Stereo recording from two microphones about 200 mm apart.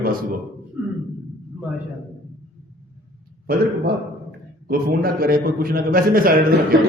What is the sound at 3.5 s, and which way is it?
A man's voice, 45° right (ahead or behind).